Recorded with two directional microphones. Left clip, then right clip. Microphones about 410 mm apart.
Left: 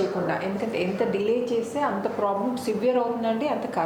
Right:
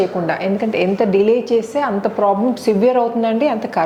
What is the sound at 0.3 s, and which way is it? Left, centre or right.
A woman's voice, right.